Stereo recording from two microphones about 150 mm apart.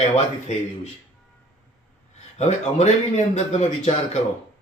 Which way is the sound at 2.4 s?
50° left (ahead or behind).